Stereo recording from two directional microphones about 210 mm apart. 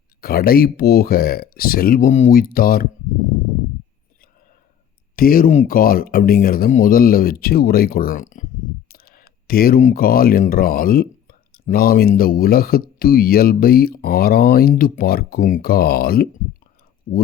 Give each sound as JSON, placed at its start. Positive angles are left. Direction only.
{"t": 0.2, "sound": "speech", "side_deg": 45}
{"t": 5.1, "sound": "speech", "side_deg": 45}
{"t": 8.9, "sound": "a sound", "side_deg": 45}
{"t": 11.7, "sound": "speech", "side_deg": 45}